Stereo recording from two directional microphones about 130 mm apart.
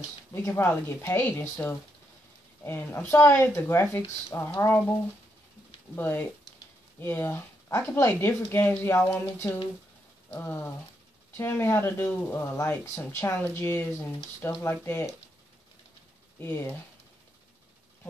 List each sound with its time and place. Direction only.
0.3 s speech: 20° left (ahead or behind)
5.9 s speech: 15° left (ahead or behind)
16.3 s speech: 15° left (ahead or behind)